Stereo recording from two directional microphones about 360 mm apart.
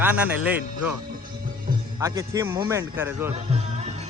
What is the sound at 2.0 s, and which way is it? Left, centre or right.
Speech, centre.